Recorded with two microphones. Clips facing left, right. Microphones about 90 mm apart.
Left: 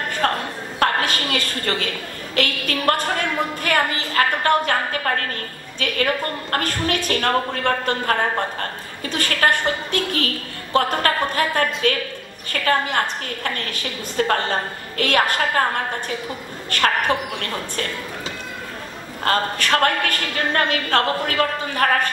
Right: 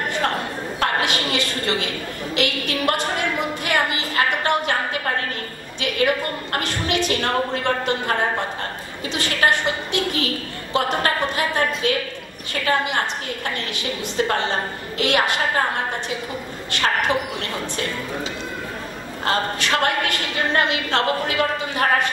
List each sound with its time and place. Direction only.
0.2 s a sound: 45° left (ahead or behind)
2.3 s a woman's voice: 45° left (ahead or behind)
9.1 s a woman's voice: 50° left (ahead or behind)
17.1 s a woman's voice: 45° left (ahead or behind)
19.2 s a woman's voice: 45° left (ahead or behind)